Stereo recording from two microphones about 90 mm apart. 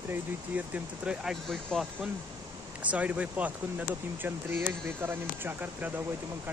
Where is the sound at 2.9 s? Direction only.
15° right (ahead or behind).